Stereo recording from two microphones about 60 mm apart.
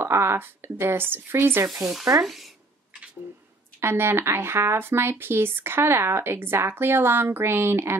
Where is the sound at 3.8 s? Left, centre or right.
Right.